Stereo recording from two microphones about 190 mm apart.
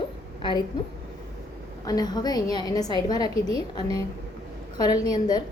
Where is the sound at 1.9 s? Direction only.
20° left (ahead or behind).